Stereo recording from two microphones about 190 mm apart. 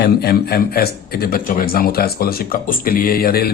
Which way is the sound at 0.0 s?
55° left (ahead or behind).